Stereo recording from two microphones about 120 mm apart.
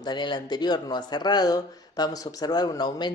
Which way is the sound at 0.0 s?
40° left (ahead or behind).